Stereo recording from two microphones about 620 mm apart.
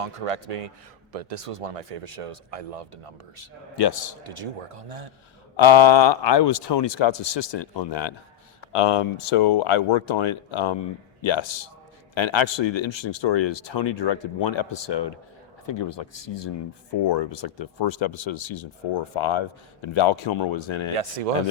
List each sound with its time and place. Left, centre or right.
0.0 s speech: right
3.8 s a man's voice: left
4.2 s speech: right
5.5 s speech: left
8.7 s speech: left